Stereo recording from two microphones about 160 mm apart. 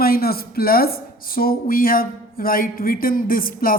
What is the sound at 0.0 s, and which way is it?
Speech, 70° left (ahead or behind).